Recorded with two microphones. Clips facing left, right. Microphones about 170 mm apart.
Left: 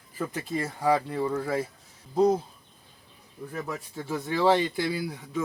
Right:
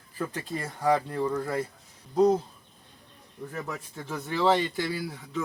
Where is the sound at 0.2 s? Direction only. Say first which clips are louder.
Left 2 dB; 10° left (ahead or behind).